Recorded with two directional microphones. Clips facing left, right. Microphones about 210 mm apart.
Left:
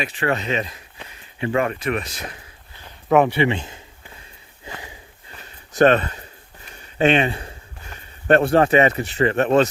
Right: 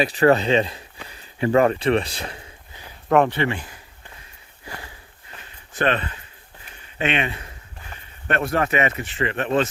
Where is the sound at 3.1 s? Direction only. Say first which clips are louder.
Left 2 dB; 10° left (ahead or behind).